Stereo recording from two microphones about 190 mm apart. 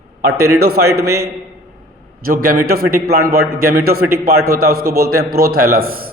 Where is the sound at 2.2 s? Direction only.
50° right (ahead or behind).